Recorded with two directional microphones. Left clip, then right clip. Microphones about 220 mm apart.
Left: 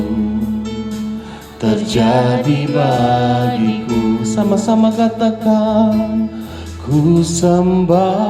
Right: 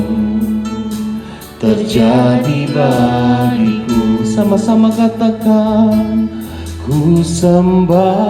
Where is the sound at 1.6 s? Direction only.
50° left (ahead or behind).